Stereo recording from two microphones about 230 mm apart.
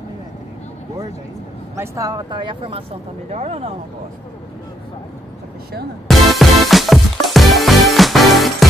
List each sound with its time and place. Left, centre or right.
1.8 s speech: centre
6.0 s music: centre